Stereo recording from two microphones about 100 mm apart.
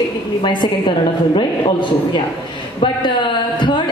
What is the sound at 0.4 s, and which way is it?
Speech, 55° left (ahead or behind).